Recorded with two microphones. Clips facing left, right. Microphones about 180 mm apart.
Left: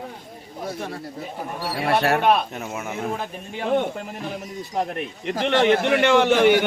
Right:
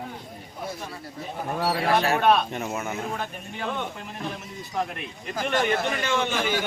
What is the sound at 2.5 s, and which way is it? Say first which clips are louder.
Speech: right 1 dB; centre (ahead or behind).